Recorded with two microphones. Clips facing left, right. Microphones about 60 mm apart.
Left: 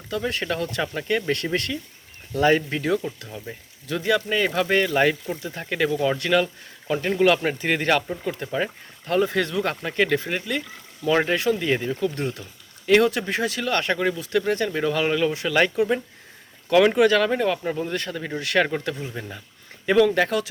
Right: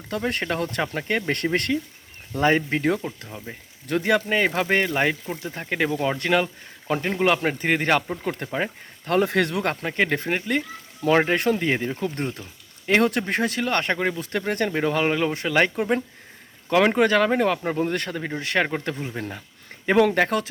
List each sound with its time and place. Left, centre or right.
0.1 s speech: right
2.3 s speech: right
4.9 s speech: centre
7.0 s speech: right
8.2 s speech: right
8.4 s speech: right
9.0 s speech: right
9.6 s speech: right
11.3 s speech: right
11.6 s speech: right
18.3 s speech: right
19.2 s speech: right